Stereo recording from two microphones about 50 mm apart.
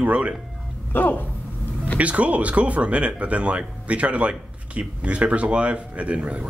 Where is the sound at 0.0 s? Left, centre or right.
Right.